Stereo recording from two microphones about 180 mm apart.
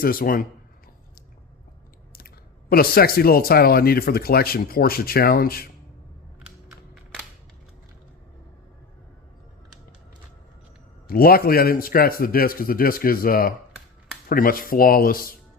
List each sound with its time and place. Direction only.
0.0 s speech: 55° left (ahead or behind)
2.1 s speech: 55° left (ahead or behind)
6.7 s a sound: centre (ahead or behind)
11.1 s speech: 55° left (ahead or behind)